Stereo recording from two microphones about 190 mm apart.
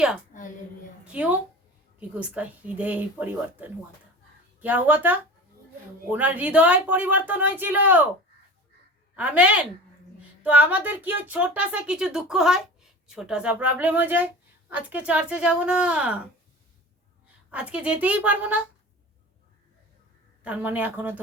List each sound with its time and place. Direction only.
0.3 s a sound: 40° left (ahead or behind)
1.0 s a woman's voice: 5° right (ahead or behind)
9.1 s speech: 5° right (ahead or behind)
17.5 s speech: 5° right (ahead or behind)
20.4 s speech: 5° right (ahead or behind)